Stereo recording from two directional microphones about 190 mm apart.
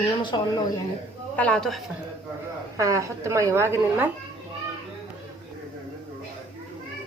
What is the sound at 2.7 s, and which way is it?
A woman's voice, 15° right (ahead or behind).